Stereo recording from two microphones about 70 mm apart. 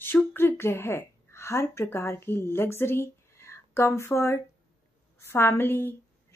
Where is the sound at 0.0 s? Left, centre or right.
Left.